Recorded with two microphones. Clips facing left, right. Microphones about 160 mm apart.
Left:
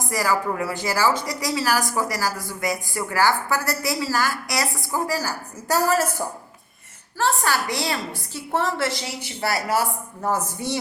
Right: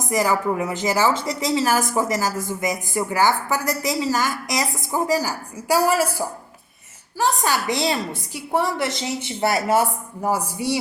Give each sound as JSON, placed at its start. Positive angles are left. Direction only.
{"t": 0.0, "sound": "a woman's voice", "side_deg": -20}
{"t": 10.2, "sound": "a woman's voice", "side_deg": -10}